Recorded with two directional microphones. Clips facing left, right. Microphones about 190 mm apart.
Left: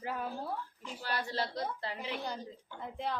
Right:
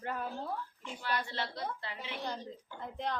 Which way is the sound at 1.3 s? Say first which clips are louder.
Left 4 dB; 40° left (ahead or behind).